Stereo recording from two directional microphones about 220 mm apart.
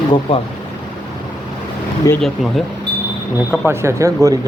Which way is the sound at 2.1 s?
15° left (ahead or behind).